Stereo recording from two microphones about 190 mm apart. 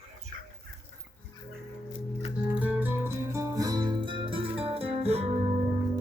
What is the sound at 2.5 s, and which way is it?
Music, 10° right (ahead or behind).